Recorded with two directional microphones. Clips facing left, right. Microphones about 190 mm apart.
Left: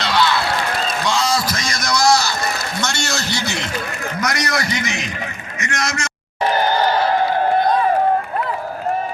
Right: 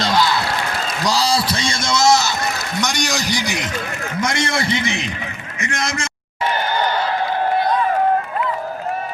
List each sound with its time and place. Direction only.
0.0 s run: 40° right (ahead or behind)
1.0 s a sound: 35° right (ahead or behind); by 3.7 s 15° right (ahead or behind)
4.2 s a man's voice: 25° right (ahead or behind)